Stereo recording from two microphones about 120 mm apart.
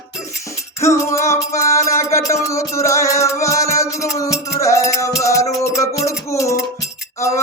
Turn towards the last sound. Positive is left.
turn(degrees=25)  # may be behind; listen again after turning